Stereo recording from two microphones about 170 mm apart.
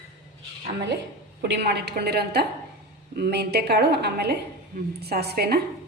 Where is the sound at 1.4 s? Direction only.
80° right; by 5.6 s 65° right (ahead or behind).